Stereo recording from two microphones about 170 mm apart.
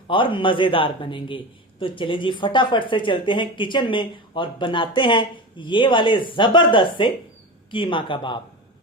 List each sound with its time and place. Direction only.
0.1 s a man's voice: 30° left (ahead or behind)